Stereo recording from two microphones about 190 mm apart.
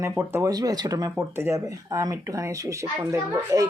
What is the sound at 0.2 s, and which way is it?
Speech, 15° right (ahead or behind).